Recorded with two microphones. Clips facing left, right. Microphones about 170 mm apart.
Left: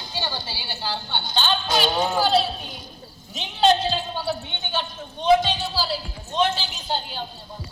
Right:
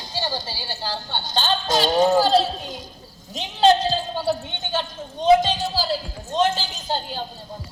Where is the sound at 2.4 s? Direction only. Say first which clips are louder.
Right 3 dB; 90° right.